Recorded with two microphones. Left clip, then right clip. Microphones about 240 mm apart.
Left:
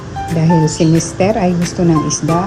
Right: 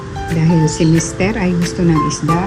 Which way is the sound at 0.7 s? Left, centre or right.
Centre.